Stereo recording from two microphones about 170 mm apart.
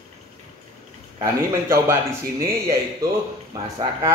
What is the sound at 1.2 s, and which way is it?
Speech, 15° right (ahead or behind).